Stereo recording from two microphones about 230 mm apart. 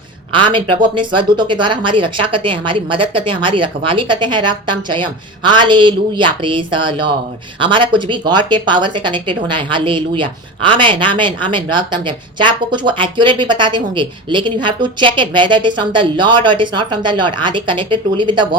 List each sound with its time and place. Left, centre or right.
0.3 s speech: right